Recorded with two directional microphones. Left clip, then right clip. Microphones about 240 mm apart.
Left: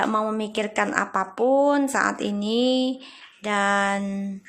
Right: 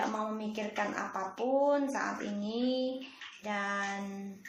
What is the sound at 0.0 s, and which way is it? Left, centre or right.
A woman's voice, left.